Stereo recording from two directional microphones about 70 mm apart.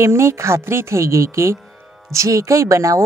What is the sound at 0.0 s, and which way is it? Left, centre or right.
A woman's voice, right.